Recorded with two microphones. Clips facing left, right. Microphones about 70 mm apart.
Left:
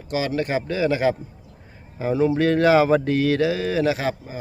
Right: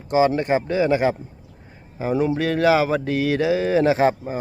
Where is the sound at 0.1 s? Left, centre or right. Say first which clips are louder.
Right 5 dB; right.